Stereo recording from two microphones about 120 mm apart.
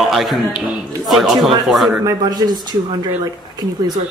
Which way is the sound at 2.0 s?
35° right (ahead or behind).